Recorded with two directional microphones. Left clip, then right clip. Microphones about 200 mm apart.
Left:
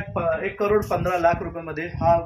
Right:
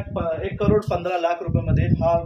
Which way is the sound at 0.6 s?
20° right (ahead or behind).